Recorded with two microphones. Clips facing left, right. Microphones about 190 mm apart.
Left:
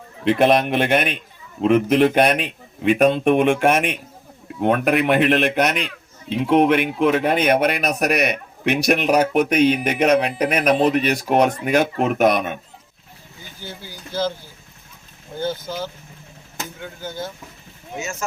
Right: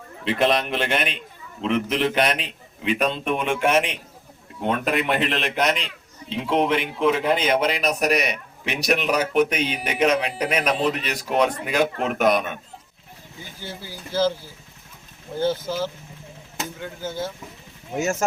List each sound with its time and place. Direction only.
0.3 s a man's voice: 55° left (ahead or behind)
14.1 s speech: 5° right (ahead or behind)
17.9 s speech: 45° right (ahead or behind)